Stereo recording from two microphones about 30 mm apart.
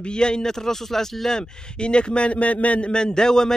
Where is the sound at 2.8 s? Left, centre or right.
Left.